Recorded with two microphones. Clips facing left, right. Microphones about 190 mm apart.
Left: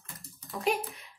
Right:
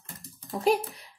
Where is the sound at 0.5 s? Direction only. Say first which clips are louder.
Right 6 dB; 35° right (ahead or behind).